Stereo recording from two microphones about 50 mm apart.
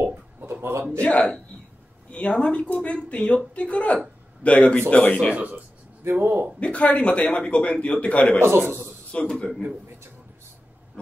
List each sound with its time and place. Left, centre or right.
0.0 s a sound: right
0.9 s a man's voice: left
5.3 s speech: right
6.0 s a man's voice: right
6.6 s a man's voice: left
8.4 s a man's voice: right
9.1 s a man's voice: left